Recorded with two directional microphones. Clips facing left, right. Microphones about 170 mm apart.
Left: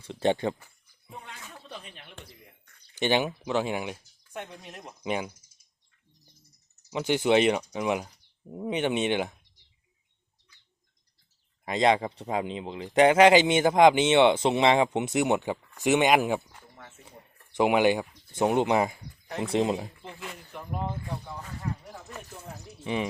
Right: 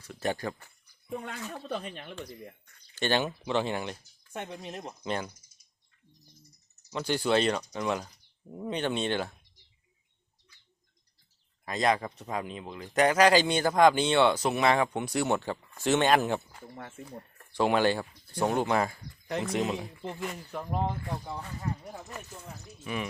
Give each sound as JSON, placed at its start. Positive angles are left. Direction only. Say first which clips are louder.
{"t": 0.0, "sound": "speech", "louder": "left 6 dB", "side_deg": 25}
{"t": 1.2, "sound": "speech", "louder": "right 8 dB", "side_deg": -50}
{"t": 2.9, "sound": "speech", "louder": "left 3 dB", "side_deg": 15}
{"t": 4.3, "sound": "speech", "louder": "right 2 dB", "side_deg": -20}
{"t": 5.0, "sound": "speech", "louder": "left 3 dB", "side_deg": 10}
{"t": 6.9, "sound": "speech", "louder": "left 4 dB", "side_deg": 20}
{"t": 11.6, "sound": "speech", "louder": "left 4 dB", "side_deg": 25}
{"t": 22.8, "sound": "speech", "louder": "left 5 dB", "side_deg": 25}